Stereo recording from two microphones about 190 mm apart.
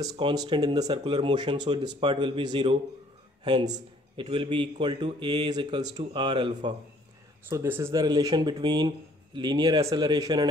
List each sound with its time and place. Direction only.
0.0 s speech: 20° right (ahead or behind)
7.4 s speech: 10° right (ahead or behind)